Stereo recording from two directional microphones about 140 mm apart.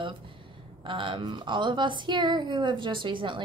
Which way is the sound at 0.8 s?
35° right (ahead or behind).